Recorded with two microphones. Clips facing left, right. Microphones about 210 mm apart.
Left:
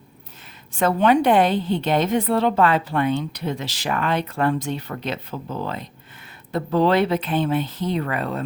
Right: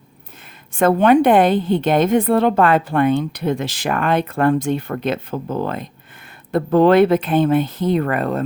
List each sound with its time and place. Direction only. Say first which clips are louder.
0.7 s a woman's voice: right 5 dB; 50° right (ahead or behind)